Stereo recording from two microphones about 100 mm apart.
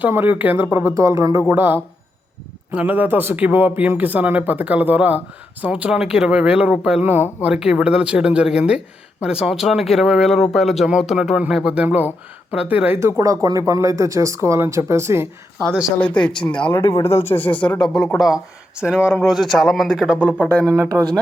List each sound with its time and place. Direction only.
0.0 s speech: 20° right (ahead or behind)
0.9 s speech: 30° right (ahead or behind)
1.5 s speech: 20° right (ahead or behind)
7.5 s speech: 10° right (ahead or behind)
13.0 s speech: 30° right (ahead or behind)
16.0 s speech: 15° left (ahead or behind)
16.9 s speech: 85° left
17.2 s speech: 20° left (ahead or behind); by 18.3 s centre (ahead or behind)
18.8 s speech: 10° right (ahead or behind)
19.2 s speech: centre (ahead or behind)
20.7 s speech: 35° right (ahead or behind)